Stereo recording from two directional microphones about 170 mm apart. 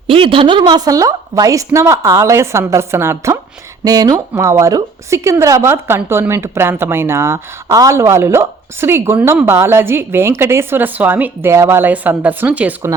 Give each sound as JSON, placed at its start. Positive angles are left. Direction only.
{"t": 0.1, "sound": "a woman's voice", "side_deg": -30}